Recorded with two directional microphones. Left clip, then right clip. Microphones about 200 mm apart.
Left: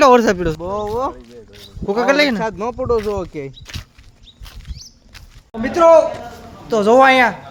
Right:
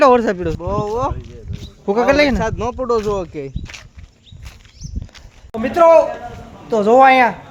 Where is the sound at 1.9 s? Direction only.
15° right (ahead or behind).